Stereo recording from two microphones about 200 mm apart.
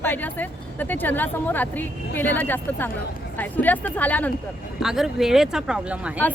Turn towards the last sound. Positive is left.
turn(degrees=-5)  # may be behind; listen again after turning